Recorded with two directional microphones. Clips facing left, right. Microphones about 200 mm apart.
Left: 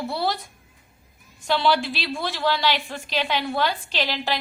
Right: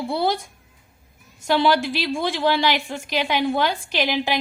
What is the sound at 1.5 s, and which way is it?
A woman's voice, 15° right (ahead or behind).